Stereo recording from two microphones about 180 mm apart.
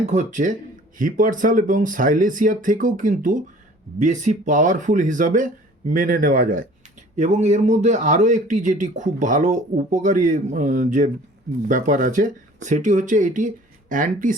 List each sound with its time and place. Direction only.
0.0 s a man's voice: 40° right (ahead or behind)
7.2 s a man's voice: 40° right (ahead or behind)